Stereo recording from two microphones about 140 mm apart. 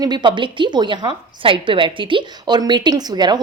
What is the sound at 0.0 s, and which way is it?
A woman's voice, 30° right (ahead or behind).